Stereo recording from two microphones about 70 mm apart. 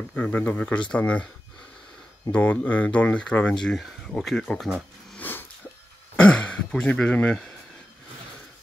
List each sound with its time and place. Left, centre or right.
0.1 s speech: centre
2.3 s speech: left; by 4.6 s centre
5.1 s a sound: left
6.1 s speech: centre